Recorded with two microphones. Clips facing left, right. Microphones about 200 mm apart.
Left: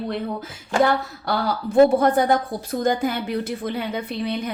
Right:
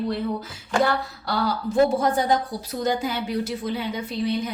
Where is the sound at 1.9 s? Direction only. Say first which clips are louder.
Left 4 dB; 55° left (ahead or behind).